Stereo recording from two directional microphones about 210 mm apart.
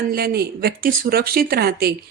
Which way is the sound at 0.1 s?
45° right (ahead or behind).